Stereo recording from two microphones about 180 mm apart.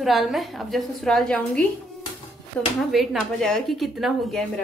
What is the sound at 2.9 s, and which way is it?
A woman's voice, centre (ahead or behind).